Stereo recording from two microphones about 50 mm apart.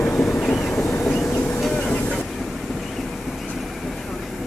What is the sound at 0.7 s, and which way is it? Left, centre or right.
Vehicle, left.